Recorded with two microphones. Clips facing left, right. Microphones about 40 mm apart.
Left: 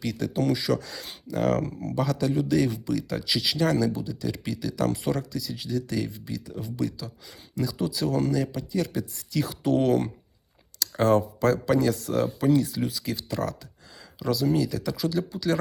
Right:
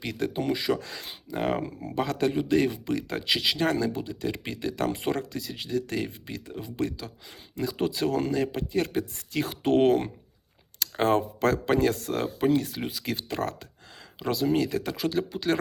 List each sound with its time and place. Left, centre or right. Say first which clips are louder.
0.0 s speech: left 2 dB; right